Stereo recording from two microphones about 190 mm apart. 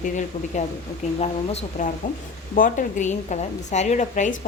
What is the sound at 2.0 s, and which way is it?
A woman's voice, 45° left (ahead or behind).